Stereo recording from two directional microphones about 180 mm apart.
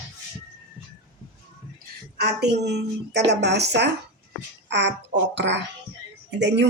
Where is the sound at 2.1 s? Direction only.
65° right (ahead or behind).